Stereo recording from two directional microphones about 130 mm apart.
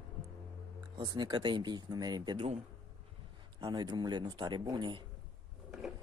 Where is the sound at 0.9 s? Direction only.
35° right (ahead or behind).